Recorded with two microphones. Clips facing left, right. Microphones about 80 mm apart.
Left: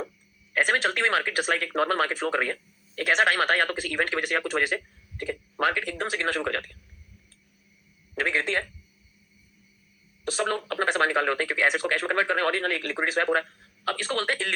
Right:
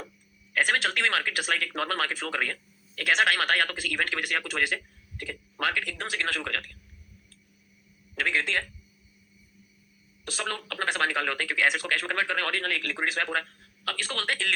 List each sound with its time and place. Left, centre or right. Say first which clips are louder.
0.5 s speech: left 2 dB; left
8.1 s speech: left 2 dB; left
10.2 s speech: left 6 dB; left